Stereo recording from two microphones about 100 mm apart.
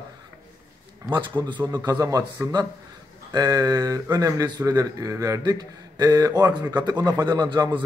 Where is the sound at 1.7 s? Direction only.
40° right (ahead or behind).